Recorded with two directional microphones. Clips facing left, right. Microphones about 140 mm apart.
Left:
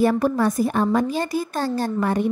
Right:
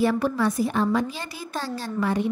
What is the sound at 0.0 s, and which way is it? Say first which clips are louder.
A woman's voice: left 3 dB; 45° left (ahead or behind).